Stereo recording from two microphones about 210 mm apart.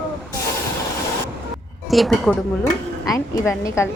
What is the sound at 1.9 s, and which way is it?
Speech, centre (ahead or behind).